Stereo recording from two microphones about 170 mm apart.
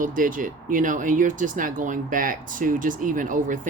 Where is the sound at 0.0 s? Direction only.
50° right (ahead or behind).